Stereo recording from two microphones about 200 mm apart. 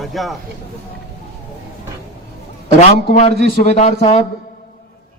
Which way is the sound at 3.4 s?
35° left (ahead or behind).